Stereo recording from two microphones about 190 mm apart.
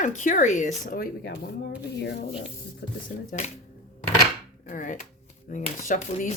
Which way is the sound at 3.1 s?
45° left (ahead or behind).